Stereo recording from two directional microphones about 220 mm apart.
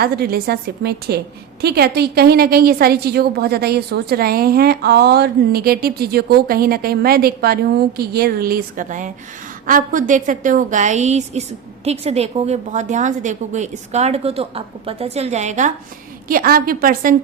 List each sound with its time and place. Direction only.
0.0 s a woman's voice: 45° right (ahead or behind)